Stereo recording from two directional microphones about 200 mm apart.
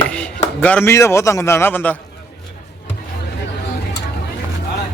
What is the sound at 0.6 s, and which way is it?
Speech, 5° left (ahead or behind).